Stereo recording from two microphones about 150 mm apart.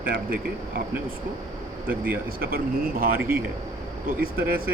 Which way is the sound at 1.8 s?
10° right (ahead or behind).